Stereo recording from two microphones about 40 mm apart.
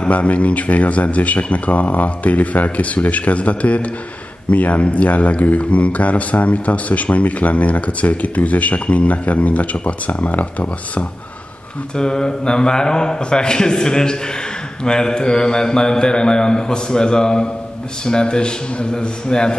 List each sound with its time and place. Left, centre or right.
0.0 s speech: left
11.9 s a man's voice: centre